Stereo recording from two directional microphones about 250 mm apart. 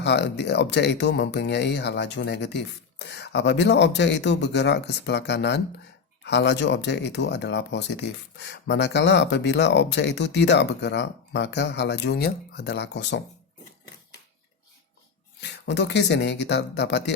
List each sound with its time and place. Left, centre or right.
0.0 s speech: left
15.4 s speech: left